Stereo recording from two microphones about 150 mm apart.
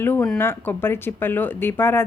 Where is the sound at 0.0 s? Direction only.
10° left (ahead or behind).